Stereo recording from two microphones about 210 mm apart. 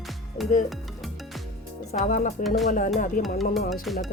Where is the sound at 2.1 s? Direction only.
40° left (ahead or behind).